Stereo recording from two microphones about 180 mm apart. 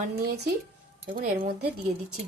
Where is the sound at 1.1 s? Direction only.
50° right (ahead or behind).